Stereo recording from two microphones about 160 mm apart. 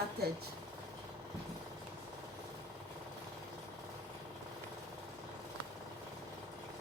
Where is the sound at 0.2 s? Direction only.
90° right.